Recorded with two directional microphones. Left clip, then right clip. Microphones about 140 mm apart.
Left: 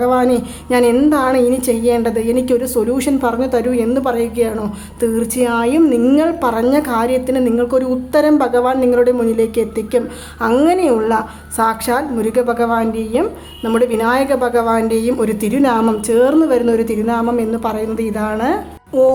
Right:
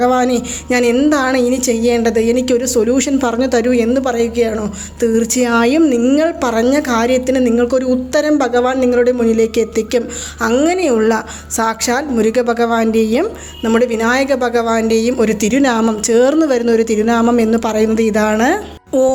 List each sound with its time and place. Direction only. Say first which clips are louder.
0.0 s a woman's voice: even; 20° right (ahead or behind)
3.8 s a woman's voice: right 1 dB; 5° right (ahead or behind)
5.4 s a woman's voice: right 1 dB; 30° right (ahead or behind)
6.1 s a woman's voice: right 1 dB; 15° right (ahead or behind)
11.5 s a woman's voice: even; 15° right (ahead or behind); by 13.2 s 35° right (ahead or behind)
13.7 s a woman's voice: right 1 dB; 10° right (ahead or behind); by 19.1 s 30° right (ahead or behind)